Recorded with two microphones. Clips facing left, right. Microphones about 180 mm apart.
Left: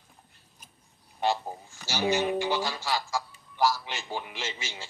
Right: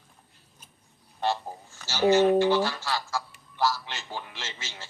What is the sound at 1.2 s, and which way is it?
A man's voice, 15° left (ahead or behind).